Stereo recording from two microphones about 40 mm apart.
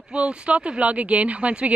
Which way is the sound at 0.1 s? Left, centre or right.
Right.